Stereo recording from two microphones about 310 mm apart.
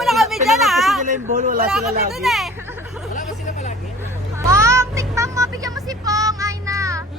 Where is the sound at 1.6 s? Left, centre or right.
Centre.